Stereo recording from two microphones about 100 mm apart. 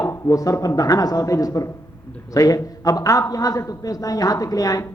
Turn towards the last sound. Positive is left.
turn(degrees=35)  # may be behind; listen again after turning